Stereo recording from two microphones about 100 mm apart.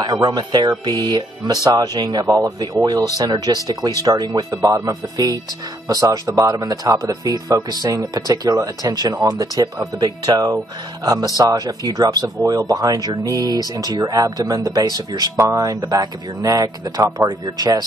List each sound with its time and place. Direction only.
0.0 s speech: 45° right (ahead or behind)